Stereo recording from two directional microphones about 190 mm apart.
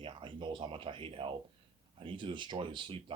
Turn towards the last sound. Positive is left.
turn(degrees=-25)  # may be behind; listen again after turning